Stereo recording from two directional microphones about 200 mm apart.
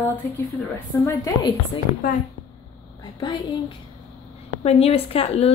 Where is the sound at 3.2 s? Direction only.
25° left (ahead or behind).